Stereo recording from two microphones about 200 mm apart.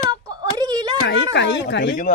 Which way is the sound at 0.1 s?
20° right (ahead or behind).